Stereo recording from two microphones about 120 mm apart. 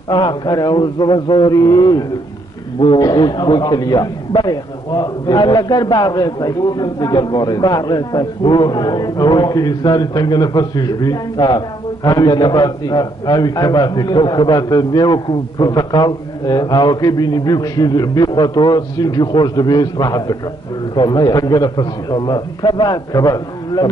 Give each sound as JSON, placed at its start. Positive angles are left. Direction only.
{"t": 0.1, "sound": "a man's voice", "side_deg": 40}